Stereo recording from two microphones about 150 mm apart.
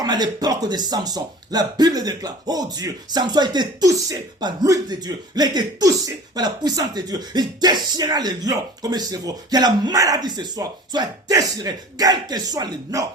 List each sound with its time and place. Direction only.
0.0 s speech: 25° right (ahead or behind)